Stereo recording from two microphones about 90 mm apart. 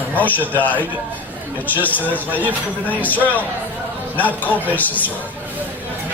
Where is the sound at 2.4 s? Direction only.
20° right (ahead or behind).